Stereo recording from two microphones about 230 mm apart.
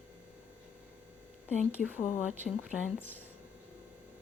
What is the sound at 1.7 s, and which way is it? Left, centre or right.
Speech, centre.